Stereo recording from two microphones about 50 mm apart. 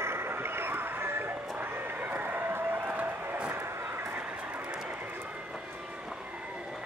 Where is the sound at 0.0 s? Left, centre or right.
Right.